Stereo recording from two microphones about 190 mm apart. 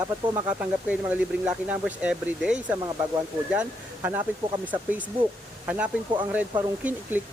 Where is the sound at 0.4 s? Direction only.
5° right (ahead or behind).